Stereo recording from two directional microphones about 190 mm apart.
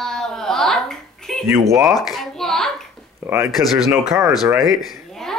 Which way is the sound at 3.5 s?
Centre (ahead or behind).